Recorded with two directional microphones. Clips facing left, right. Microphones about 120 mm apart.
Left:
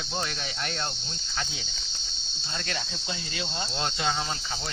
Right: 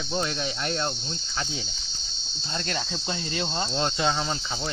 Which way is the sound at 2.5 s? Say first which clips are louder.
Right 4 dB; 40° right (ahead or behind).